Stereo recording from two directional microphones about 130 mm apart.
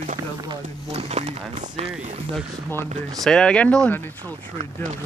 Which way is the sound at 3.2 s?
5° left (ahead or behind).